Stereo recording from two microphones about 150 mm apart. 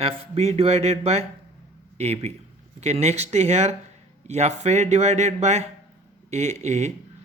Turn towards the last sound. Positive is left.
turn(degrees=-50)  # may be behind; listen again after turning